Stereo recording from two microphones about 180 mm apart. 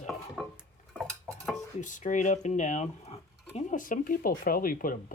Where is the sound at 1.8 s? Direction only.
45° left (ahead or behind).